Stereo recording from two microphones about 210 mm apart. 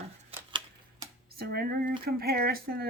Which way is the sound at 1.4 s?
50° right (ahead or behind).